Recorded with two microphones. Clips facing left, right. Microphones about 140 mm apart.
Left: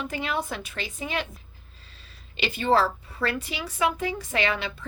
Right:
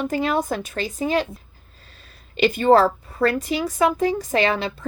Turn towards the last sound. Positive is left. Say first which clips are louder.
# right 6 dB
turn(degrees=-35)  # may be behind; listen again after turning